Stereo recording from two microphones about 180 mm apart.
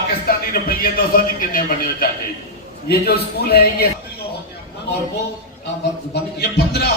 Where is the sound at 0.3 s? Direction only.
55° left (ahead or behind).